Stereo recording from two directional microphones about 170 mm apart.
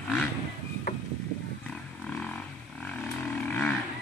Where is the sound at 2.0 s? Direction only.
5° left (ahead or behind).